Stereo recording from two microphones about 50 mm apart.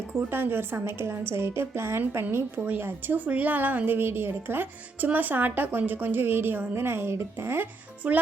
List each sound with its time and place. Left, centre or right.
0.1 s a woman's voice: right
2.6 s speech: right
4.9 s a woman's voice: right
7.6 s a child's voice: right